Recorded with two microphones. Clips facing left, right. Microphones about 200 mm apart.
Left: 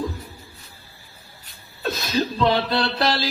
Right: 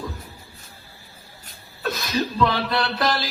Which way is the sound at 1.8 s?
30° left (ahead or behind).